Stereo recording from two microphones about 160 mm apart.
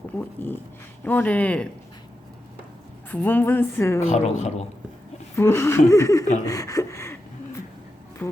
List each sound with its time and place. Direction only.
0.2 s a woman's voice: 10° left (ahead or behind)
3.1 s a woman's voice: 10° left (ahead or behind)
4.0 s a woman's voice: 45° left (ahead or behind)
5.4 s a woman's voice: 15° left (ahead or behind)
6.4 s a sound: 20° left (ahead or behind)
8.2 s speech: 10° left (ahead or behind)